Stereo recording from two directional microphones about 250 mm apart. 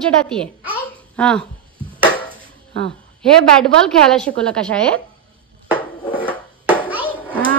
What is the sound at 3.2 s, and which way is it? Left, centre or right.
A woman's voice, centre.